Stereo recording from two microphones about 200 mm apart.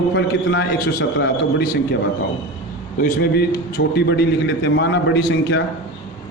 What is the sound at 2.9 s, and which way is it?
A man's voice, 45° left (ahead or behind).